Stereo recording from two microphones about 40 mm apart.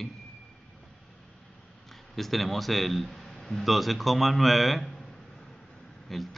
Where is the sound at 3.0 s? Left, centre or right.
Centre.